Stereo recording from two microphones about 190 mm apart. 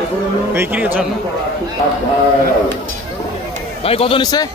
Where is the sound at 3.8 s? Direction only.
30° left (ahead or behind).